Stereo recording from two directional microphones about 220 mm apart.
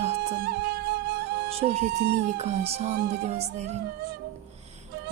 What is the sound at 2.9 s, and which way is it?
Music, 45° right (ahead or behind).